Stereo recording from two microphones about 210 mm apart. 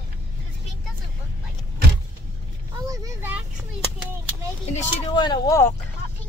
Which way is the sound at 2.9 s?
15° right (ahead or behind).